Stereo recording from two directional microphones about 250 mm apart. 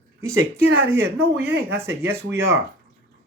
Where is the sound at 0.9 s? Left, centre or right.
Centre.